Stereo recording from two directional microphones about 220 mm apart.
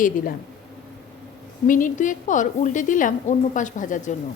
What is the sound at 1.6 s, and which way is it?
A woman's voice, 35° left (ahead or behind).